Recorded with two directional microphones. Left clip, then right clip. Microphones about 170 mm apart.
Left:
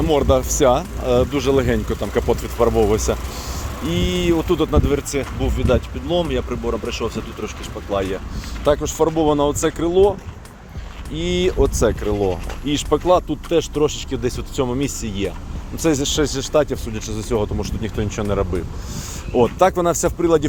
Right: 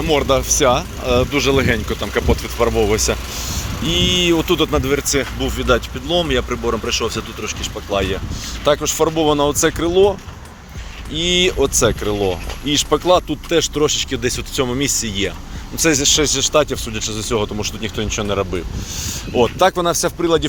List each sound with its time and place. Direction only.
0.0 s speech: 20° left (ahead or behind)
4.0 s speech: 5° left (ahead or behind)
8.6 s speech: 15° left (ahead or behind)